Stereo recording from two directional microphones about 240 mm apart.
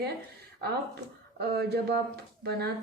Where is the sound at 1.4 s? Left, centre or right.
Right.